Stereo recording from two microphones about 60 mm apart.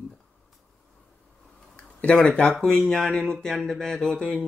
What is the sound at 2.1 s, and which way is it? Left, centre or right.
Speech, centre.